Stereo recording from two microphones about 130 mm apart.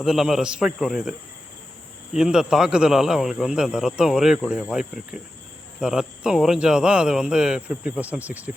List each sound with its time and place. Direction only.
0.0 s speech: 5° right (ahead or behind)
2.1 s speech: 5° right (ahead or behind)